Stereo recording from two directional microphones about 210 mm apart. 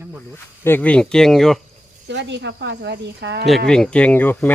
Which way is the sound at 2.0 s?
55° right (ahead or behind).